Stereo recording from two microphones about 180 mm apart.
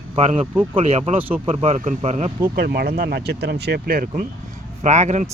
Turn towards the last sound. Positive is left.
turn(degrees=-40)  # may be behind; listen again after turning